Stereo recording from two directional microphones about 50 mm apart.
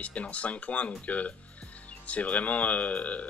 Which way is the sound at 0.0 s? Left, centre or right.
Left.